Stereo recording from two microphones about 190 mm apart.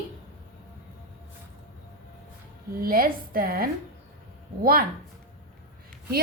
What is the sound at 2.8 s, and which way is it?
Speech, 50° right (ahead or behind).